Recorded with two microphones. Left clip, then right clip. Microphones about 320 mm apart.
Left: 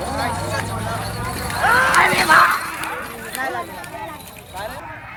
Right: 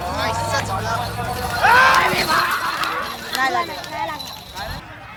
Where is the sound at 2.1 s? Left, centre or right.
Left.